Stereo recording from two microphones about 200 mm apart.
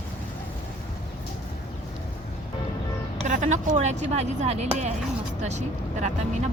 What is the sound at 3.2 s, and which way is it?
Speech, 40° right (ahead or behind).